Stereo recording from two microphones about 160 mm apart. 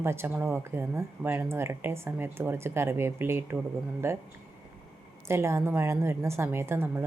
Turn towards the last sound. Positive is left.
turn(degrees=-15)  # may be behind; listen again after turning